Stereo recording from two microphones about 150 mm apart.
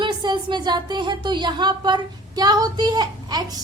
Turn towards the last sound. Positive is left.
turn(degrees=-25)  # may be behind; listen again after turning